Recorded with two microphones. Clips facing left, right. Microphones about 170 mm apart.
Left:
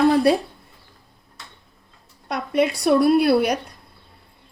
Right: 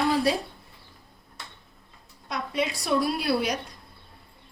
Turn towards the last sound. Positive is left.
turn(degrees=60)  # may be behind; listen again after turning